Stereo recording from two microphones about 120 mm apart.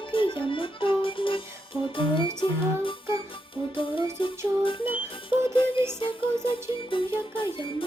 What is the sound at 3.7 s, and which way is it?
Music, 45° left (ahead or behind).